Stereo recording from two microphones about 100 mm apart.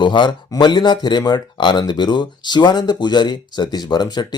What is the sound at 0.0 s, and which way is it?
Speech, 50° left (ahead or behind).